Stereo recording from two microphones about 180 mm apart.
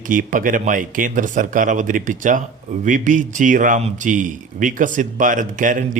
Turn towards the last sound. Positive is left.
turn(degrees=-45)  # may be behind; listen again after turning